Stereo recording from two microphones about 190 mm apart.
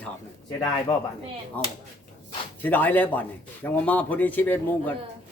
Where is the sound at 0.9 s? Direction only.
25° left (ahead or behind).